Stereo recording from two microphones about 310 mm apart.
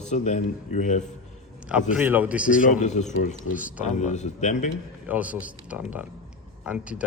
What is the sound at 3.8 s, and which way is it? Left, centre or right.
Speech, left.